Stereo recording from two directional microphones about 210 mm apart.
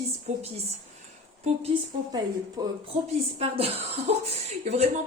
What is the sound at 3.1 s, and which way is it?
A woman's voice, 30° right (ahead or behind).